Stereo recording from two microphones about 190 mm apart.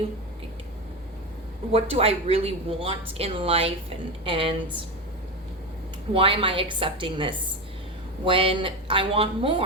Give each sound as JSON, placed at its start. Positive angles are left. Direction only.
{"t": 1.7, "sound": "speech", "side_deg": -30}
{"t": 6.1, "sound": "speech", "side_deg": -30}